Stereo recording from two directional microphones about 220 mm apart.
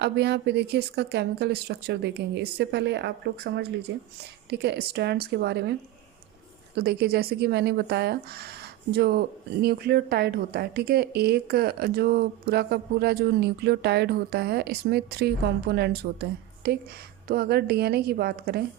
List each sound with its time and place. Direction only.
0.0 s speech: 50° right (ahead or behind)
6.7 s speech: 45° right (ahead or behind)